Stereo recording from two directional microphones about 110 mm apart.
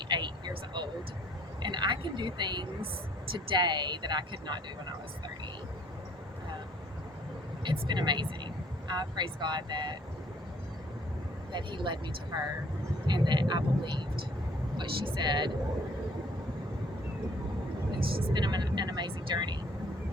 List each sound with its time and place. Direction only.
0.1 s vehicle: 45° right (ahead or behind)
1.6 s a sound: 45° right (ahead or behind)
3.3 s speech: 45° right (ahead or behind)
7.6 s speech: 45° right (ahead or behind)
11.5 s speech: 45° right (ahead or behind)
18.1 s speech: 50° right (ahead or behind)